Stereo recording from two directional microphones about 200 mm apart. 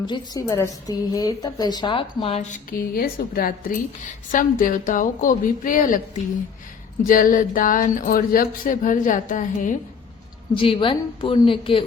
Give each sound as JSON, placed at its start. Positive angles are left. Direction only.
{"t": 0.0, "sound": "a woman's voice", "side_deg": 20}
{"t": 2.6, "sound": "a woman's voice", "side_deg": 45}
{"t": 7.0, "sound": "speech", "side_deg": 45}
{"t": 10.5, "sound": "a woman's voice", "side_deg": 25}